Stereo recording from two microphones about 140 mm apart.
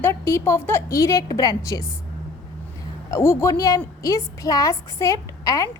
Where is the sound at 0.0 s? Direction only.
20° left (ahead or behind).